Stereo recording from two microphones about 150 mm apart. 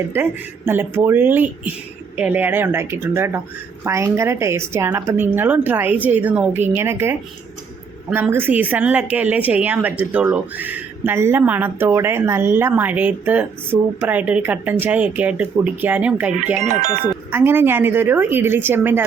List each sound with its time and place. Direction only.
0.1 s speech: 15° right (ahead or behind)
16.6 s speech: 55° right (ahead or behind)
17.3 s speech: 15° right (ahead or behind)